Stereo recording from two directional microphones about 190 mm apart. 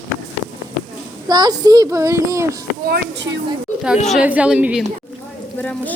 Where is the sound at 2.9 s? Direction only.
70° right (ahead or behind).